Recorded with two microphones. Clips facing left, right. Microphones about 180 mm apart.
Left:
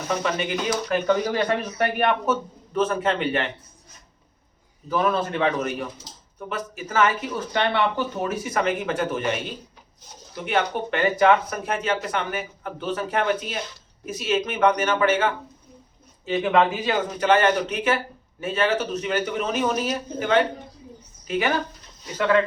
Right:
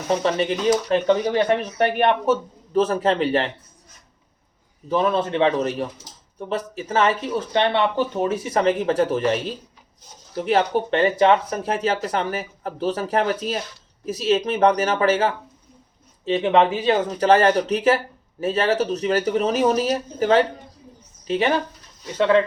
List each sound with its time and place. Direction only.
0.1 s a man's voice: 30° right (ahead or behind)
4.9 s a man's voice: 25° right (ahead or behind)